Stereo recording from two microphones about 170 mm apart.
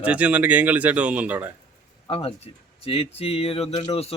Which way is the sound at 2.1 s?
35° left (ahead or behind).